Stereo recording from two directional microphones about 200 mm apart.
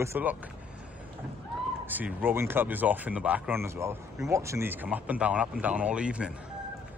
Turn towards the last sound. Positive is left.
turn(degrees=-5)  # may be behind; listen again after turning